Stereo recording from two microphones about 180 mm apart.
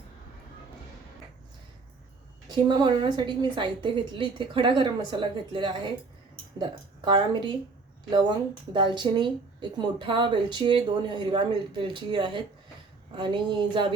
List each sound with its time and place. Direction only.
2.5 s speech: 25° right (ahead or behind)
8.7 s speech: 25° right (ahead or behind)